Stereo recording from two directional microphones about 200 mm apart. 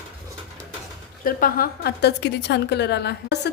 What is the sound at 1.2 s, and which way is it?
A woman's voice, 45° left (ahead or behind).